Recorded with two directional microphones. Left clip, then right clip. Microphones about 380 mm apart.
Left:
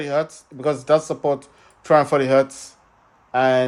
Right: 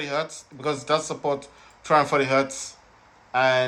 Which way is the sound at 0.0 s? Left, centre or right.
Left.